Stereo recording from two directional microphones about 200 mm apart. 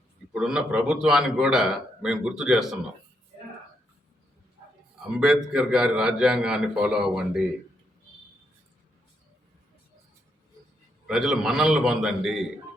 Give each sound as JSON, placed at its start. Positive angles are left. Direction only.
{"t": 0.3, "sound": "a man's voice", "side_deg": -5}
{"t": 5.1, "sound": "a man's voice", "side_deg": -5}
{"t": 11.0, "sound": "a man's voice", "side_deg": 0}